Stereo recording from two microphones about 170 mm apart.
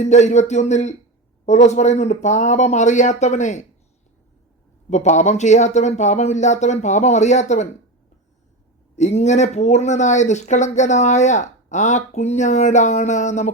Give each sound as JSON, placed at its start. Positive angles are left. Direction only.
{"t": 0.0, "sound": "speech", "side_deg": 45}
{"t": 4.9, "sound": "speech", "side_deg": 45}
{"t": 9.0, "sound": "speech", "side_deg": 40}